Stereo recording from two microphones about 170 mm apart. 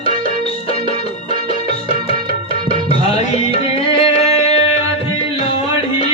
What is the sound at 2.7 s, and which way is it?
Tabla, 35° left (ahead or behind).